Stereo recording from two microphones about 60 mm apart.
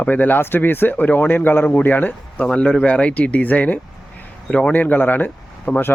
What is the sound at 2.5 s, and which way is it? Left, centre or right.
Speech, centre.